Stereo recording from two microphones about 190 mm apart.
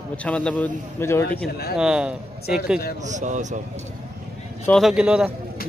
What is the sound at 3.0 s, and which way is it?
Speech, 40° right (ahead or behind).